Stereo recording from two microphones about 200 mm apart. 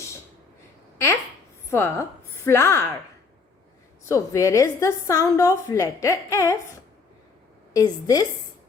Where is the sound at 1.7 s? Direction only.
15° left (ahead or behind).